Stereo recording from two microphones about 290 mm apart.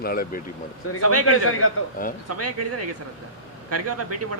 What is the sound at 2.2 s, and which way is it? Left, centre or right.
Speech, right.